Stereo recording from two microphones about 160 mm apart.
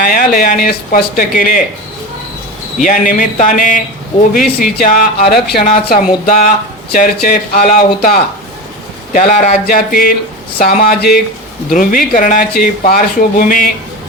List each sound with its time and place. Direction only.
0.0 s speech: 65° left (ahead or behind)
2.7 s speech: 55° left (ahead or behind); by 5.6 s 80° left
5.7 s speech: 55° left (ahead or behind)
6.9 s speech: 65° left (ahead or behind)
9.1 s speech: 55° left (ahead or behind); by 11.2 s 70° left (ahead or behind)
11.7 s speech: 60° left (ahead or behind)